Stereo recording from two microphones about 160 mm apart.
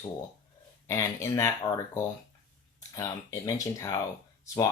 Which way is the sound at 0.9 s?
20° left (ahead or behind).